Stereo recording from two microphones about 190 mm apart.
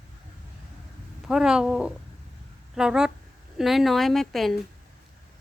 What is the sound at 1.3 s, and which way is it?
A woman's voice, 5° right (ahead or behind).